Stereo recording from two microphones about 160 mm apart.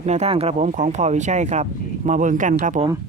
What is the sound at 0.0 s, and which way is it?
Speech, 45° right (ahead or behind).